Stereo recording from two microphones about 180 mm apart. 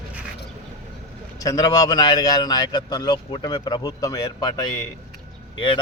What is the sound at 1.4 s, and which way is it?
A man's voice, 20° left (ahead or behind).